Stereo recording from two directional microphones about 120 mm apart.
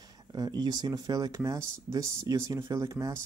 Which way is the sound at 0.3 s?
35° right (ahead or behind).